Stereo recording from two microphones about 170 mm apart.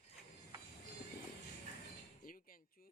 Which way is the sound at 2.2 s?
55° left (ahead or behind).